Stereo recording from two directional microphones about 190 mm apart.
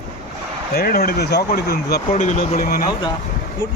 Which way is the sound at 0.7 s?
55° left (ahead or behind).